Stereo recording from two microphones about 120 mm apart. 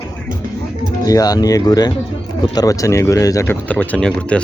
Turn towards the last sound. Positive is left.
turn(degrees=10)  # may be behind; listen again after turning